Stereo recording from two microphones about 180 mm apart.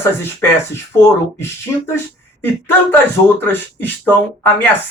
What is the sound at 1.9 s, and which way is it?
Speech, 15° left (ahead or behind).